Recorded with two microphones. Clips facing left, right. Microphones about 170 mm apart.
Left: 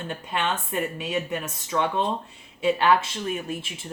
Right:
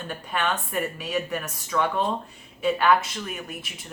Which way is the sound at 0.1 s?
25° left (ahead or behind).